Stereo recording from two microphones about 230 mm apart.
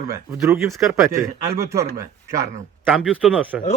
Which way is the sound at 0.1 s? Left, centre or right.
Centre.